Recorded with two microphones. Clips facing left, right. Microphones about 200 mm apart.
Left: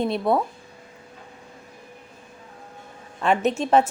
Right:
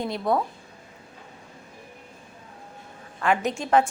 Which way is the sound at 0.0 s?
25° left (ahead or behind).